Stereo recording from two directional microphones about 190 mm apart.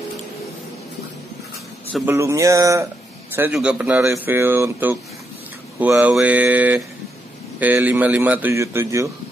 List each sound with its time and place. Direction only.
2.0 s speech: 15° right (ahead or behind)